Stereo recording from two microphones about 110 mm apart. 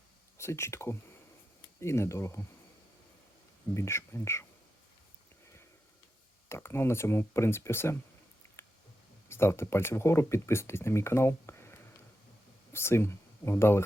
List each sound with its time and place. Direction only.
0.3 s speech: 25° left (ahead or behind)
3.8 s speech: 25° left (ahead or behind)
6.5 s speech: 25° left (ahead or behind)
8.6 s a sound: 20° left (ahead or behind)
9.3 s speech: 25° left (ahead or behind)